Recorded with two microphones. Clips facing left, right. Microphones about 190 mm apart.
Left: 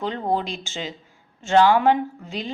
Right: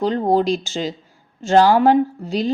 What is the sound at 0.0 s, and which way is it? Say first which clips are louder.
A woman's voice: right 7 dB; 40° right (ahead or behind).